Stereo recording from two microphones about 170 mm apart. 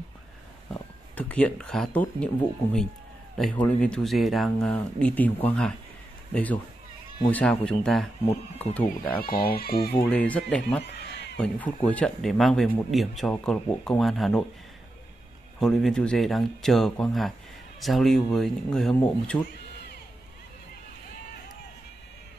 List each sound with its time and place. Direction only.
1.1 s speech: 5° left (ahead or behind)
3.3 s a man's voice: 5° left (ahead or behind)
9.2 s speech: 60° left (ahead or behind)
9.9 s speech: 10° left (ahead or behind)
10.8 s a sound: 90° left
11.3 s a man's voice: 5° left (ahead or behind)
15.6 s a man's voice: centre (ahead or behind)